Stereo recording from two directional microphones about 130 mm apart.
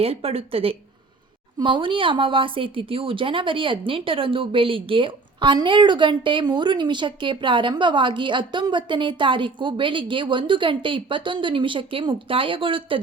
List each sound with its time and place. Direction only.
0.0 s a woman's voice: 50° right (ahead or behind)